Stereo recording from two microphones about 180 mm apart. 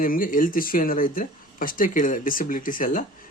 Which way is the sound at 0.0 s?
50° left (ahead or behind).